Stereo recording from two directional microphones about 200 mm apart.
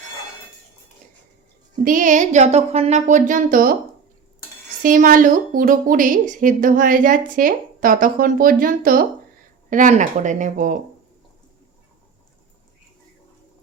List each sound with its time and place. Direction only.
1.8 s speech: 40° right (ahead or behind)
4.8 s speech: 45° right (ahead or behind)